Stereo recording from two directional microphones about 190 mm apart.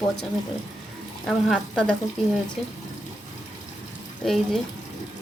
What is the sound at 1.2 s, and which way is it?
Speech, 5° left (ahead or behind).